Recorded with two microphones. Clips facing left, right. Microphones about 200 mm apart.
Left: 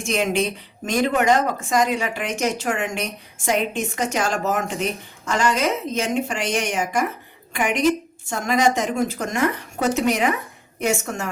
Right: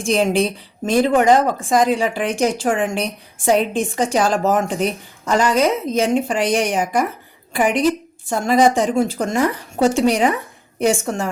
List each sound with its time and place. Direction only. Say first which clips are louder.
0.0 s speech: right 5 dB; 35° right (ahead or behind)